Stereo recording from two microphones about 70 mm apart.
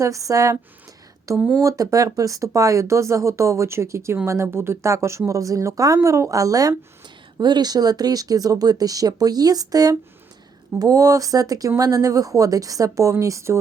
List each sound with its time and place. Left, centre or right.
0.0 s speech: right
7.3 s speech: right